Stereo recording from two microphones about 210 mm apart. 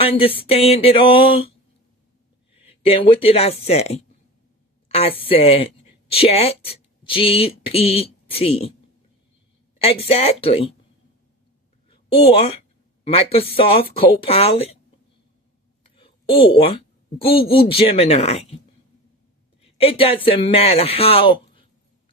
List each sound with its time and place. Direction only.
0.0 s speech: 25° left (ahead or behind)
2.6 s speech: 25° left (ahead or behind)
9.7 s speech: 30° left (ahead or behind)
11.9 s a sound: 25° left (ahead or behind)
13.1 s speech: 25° left (ahead or behind)
16.0 s a sound: 25° left (ahead or behind)
17.2 s speech: 25° left (ahead or behind)
19.6 s speech: 25° left (ahead or behind)